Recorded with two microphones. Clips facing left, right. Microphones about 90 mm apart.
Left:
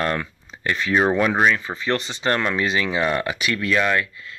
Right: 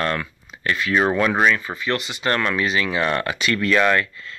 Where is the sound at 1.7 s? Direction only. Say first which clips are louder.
Left 1 dB; 30° left (ahead or behind).